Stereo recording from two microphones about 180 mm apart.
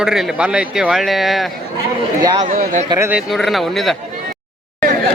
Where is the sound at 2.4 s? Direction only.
45° right (ahead or behind).